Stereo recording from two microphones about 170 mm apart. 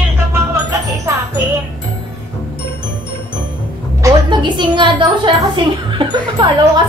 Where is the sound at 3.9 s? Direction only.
20° right (ahead or behind).